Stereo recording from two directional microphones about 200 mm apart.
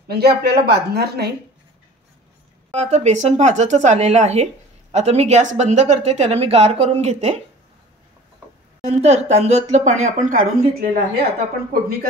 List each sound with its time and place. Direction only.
0.1 s a woman's voice: 55° right (ahead or behind)
2.7 s a woman's voice: 35° right (ahead or behind)
8.8 s a woman's voice: 35° right (ahead or behind)